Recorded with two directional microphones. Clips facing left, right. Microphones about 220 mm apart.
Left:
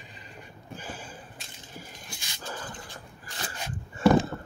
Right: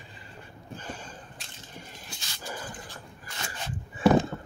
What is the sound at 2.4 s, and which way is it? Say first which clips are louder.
Dog: even; 10° right (ahead or behind).